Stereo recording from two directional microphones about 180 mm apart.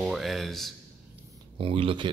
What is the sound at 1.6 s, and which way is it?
Speech, 30° right (ahead or behind).